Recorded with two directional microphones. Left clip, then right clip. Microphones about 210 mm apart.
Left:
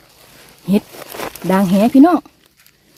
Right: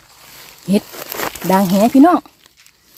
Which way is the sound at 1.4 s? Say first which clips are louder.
Right 1 dB; 5° left (ahead or behind).